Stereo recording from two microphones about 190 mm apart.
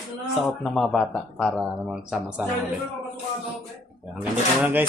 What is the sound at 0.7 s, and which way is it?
Speech, centre (ahead or behind).